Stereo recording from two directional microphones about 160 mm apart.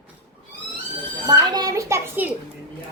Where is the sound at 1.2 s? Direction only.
25° right (ahead or behind).